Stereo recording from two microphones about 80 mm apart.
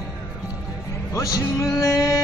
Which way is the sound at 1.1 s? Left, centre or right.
Left.